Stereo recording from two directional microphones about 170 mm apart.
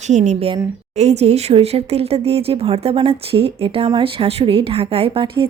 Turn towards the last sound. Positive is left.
turn(degrees=-30)  # may be behind; listen again after turning